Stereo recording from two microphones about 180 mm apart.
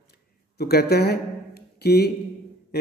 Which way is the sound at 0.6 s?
60° left (ahead or behind).